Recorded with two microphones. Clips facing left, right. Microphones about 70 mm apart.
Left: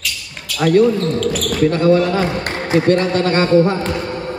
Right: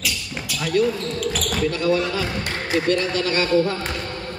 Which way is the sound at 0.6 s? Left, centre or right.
Left.